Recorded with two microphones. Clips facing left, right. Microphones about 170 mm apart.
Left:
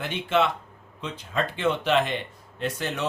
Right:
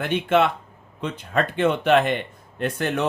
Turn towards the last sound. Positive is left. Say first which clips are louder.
# right 5 dB
turn(degrees=-55)  # may be behind; listen again after turning